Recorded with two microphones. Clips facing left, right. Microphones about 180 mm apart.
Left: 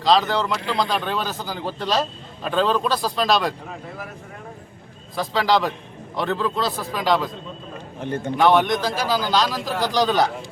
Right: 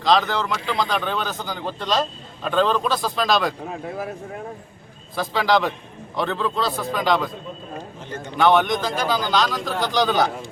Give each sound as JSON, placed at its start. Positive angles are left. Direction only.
{"t": 0.0, "sound": "speech", "side_deg": 0}
{"t": 5.1, "sound": "speech", "side_deg": 0}
{"t": 8.0, "sound": "a man's voice", "side_deg": 55}
{"t": 8.4, "sound": "speech", "side_deg": 0}